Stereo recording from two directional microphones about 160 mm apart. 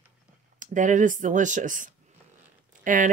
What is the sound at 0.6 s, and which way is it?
Speech, 50° right (ahead or behind).